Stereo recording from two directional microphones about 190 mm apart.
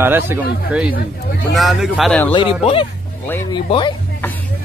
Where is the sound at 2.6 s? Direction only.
30° left (ahead or behind).